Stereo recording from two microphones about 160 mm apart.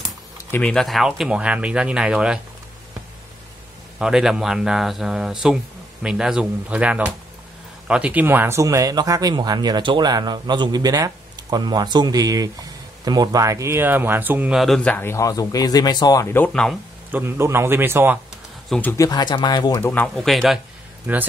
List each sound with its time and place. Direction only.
0.5 s speech: 10° left (ahead or behind)
4.0 s speech: 5° right (ahead or behind)
17.1 s speech: 15° right (ahead or behind)
18.7 s speech: 10° left (ahead or behind)
18.9 s speech: 25° left (ahead or behind)
19.8 s speech: 10° left (ahead or behind)
21.1 s speech: 10° right (ahead or behind)